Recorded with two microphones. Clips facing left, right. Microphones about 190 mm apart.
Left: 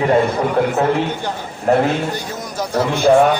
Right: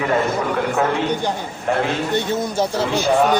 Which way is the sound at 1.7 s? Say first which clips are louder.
Left 6 dB; 40° left (ahead or behind).